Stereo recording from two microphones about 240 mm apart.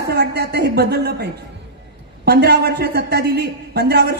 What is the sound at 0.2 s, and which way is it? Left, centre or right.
Speech, right.